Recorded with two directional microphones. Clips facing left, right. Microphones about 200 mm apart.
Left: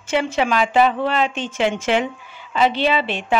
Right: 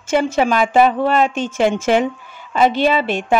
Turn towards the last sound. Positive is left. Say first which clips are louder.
# right 3 dB
turn(degrees=-45)  # may be behind; listen again after turning